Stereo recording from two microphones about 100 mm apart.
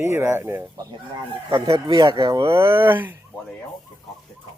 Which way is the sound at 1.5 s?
40° right (ahead or behind).